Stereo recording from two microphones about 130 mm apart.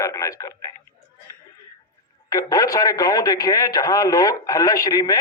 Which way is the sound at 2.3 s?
25° left (ahead or behind).